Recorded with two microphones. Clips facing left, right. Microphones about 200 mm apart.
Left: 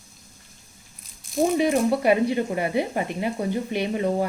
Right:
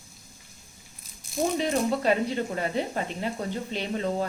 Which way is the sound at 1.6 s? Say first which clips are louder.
Left 5 dB; 10° left (ahead or behind).